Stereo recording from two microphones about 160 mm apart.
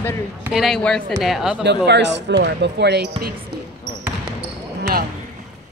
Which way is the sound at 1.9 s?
90° right.